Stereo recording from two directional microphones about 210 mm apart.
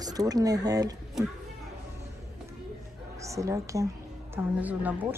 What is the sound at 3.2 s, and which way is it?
A woman's voice, 15° right (ahead or behind).